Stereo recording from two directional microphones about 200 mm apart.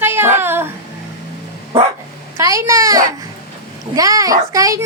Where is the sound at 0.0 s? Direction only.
10° right (ahead or behind).